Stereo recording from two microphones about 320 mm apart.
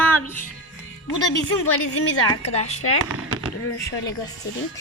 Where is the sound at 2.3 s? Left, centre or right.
Centre.